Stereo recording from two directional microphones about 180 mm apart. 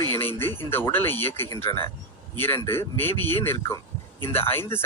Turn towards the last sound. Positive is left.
turn(degrees=10)  # may be behind; listen again after turning